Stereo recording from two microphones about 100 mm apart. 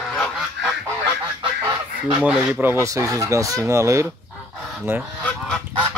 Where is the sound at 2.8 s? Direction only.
35° right (ahead or behind).